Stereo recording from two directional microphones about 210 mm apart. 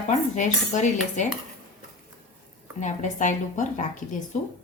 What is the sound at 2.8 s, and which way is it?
Speech, 35° left (ahead or behind).